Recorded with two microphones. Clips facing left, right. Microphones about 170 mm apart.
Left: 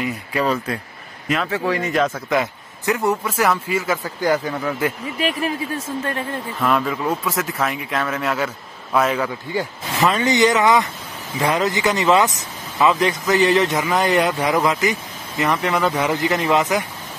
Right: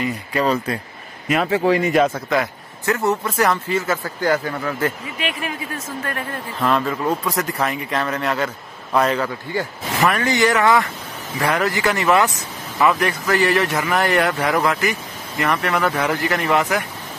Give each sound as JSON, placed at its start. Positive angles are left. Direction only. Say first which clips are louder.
{"t": 0.0, "sound": "speech", "louder": "right 1 dB", "side_deg": 5}
{"t": 1.3, "sound": "a man's voice", "louder": "right 4 dB", "side_deg": -20}
{"t": 2.2, "sound": "speech", "louder": "even", "side_deg": 15}
{"t": 3.1, "sound": "speech", "louder": "right 1 dB", "side_deg": 5}
{"t": 5.2, "sound": "speech", "louder": "left 4 dB", "side_deg": 35}
{"t": 6.6, "sound": "speech", "louder": "right 1 dB", "side_deg": 5}